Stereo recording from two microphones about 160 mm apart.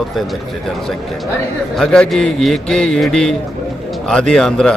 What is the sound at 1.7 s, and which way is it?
Speech, 5° left (ahead or behind).